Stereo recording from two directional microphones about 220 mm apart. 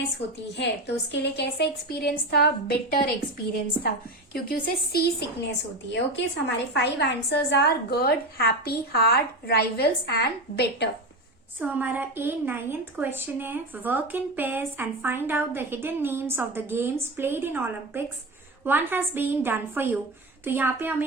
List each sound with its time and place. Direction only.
0.5 s a woman's voice: 50° left (ahead or behind)
11.6 s a woman's voice: 5° right (ahead or behind)